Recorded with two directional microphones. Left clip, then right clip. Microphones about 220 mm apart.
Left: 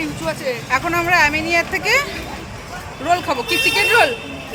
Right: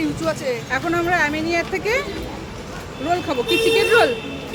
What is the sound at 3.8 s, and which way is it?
Speech, 10° right (ahead or behind).